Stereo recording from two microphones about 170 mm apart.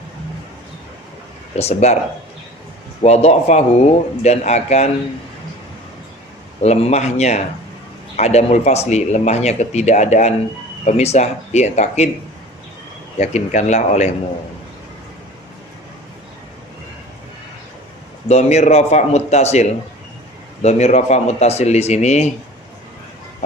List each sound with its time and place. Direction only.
1.5 s speech: 40° left (ahead or behind)
3.0 s speech: 40° left (ahead or behind)
6.6 s speech: 40° left (ahead or behind)
13.1 s speech: 45° left (ahead or behind)
18.3 s speech: 40° left (ahead or behind)